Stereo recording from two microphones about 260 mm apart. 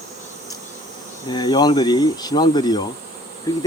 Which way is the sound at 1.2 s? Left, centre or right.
Centre.